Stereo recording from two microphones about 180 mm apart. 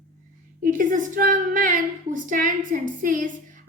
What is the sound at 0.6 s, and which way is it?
Speech, 50° right (ahead or behind).